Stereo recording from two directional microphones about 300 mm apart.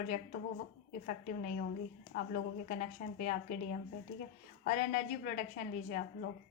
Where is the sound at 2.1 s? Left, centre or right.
Left.